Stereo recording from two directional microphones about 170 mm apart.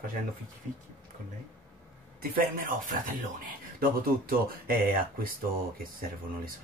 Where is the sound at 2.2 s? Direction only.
55° right (ahead or behind).